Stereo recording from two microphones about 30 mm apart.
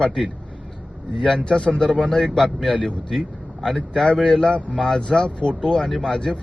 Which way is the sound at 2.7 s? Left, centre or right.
Left.